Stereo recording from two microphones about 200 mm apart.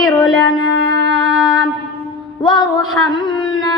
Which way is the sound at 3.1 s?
20° left (ahead or behind).